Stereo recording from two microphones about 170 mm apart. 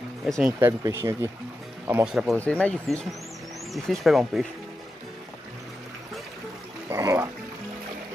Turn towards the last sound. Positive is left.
turn(degrees=-15)  # may be behind; listen again after turning